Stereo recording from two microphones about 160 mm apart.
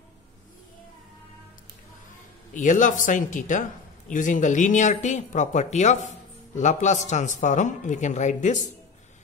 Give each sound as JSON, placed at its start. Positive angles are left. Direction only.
{"t": 2.5, "sound": "speech", "side_deg": 50}